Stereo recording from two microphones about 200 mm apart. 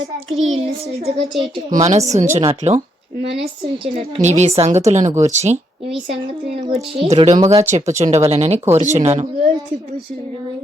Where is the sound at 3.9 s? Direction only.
35° right (ahead or behind).